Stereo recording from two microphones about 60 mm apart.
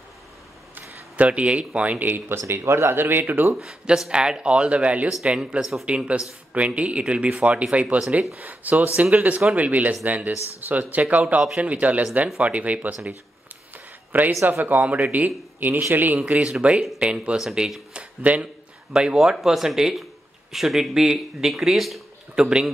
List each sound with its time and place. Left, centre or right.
1.1 s speech: right
3.5 s speech: centre
14.4 s speech: right
16.3 s speech: centre
17.4 s speech: centre
17.9 s speech: right
18.9 s speech: centre
22.3 s speech: centre